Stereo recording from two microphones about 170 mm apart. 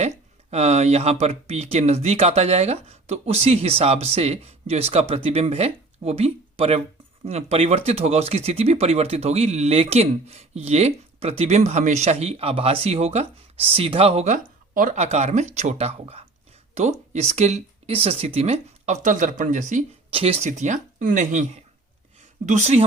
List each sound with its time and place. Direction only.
0.5 s speech: 40° right (ahead or behind)
19.0 s speech: 50° right (ahead or behind)
20.1 s speech: 35° right (ahead or behind)
22.4 s speech: 45° right (ahead or behind)